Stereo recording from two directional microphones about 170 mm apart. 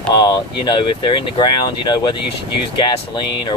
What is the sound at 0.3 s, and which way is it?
Speech, 25° left (ahead or behind).